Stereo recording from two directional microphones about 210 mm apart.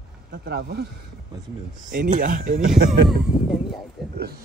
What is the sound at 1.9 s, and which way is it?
Speech, 40° right (ahead or behind).